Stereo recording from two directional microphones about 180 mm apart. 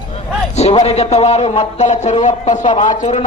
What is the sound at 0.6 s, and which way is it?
Speech, 35° left (ahead or behind).